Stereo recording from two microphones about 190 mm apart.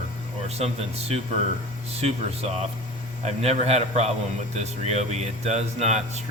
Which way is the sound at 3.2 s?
35° right (ahead or behind).